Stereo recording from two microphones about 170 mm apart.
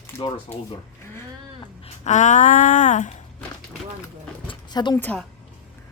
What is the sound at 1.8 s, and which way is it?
Speech, 40° left (ahead or behind).